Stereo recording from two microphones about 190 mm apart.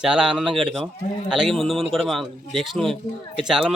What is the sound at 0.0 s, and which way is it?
Speech, 5° right (ahead or behind).